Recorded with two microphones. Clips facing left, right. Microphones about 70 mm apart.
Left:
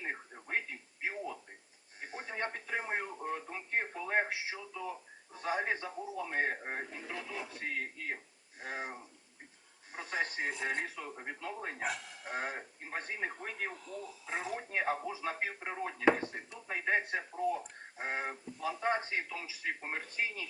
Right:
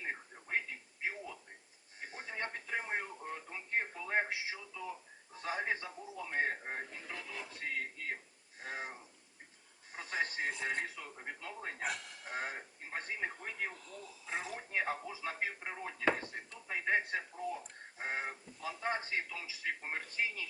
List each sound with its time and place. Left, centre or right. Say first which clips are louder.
0.0 s television: left 2 dB; centre
2.0 s radio: left 3 dB; centre
5.3 s a man's voice: left 3 dB; centre